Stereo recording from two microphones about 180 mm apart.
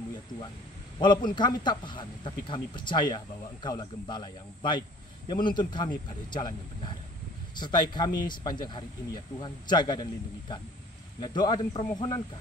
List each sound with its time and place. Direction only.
0.9 s speech: 25° left (ahead or behind)
11.1 s speech: 25° left (ahead or behind)